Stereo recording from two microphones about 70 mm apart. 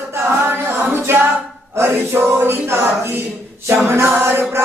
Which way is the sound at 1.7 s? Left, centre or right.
Right.